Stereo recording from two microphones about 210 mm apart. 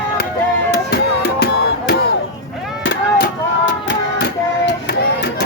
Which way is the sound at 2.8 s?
55° left (ahead or behind).